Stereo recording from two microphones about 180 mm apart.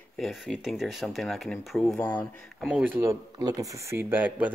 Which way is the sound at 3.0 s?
20° right (ahead or behind).